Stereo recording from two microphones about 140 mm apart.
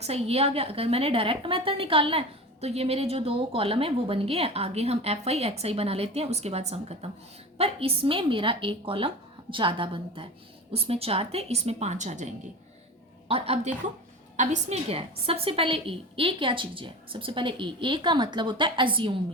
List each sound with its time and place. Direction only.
0.0 s a woman's voice: 45° right (ahead or behind)
13.2 s a woman's voice: 45° right (ahead or behind)
14.3 s a woman's voice: 60° right (ahead or behind); by 19.1 s 35° right (ahead or behind)